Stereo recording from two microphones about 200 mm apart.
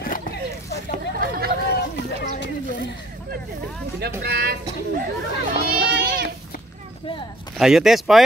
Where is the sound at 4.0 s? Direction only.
55° right (ahead or behind).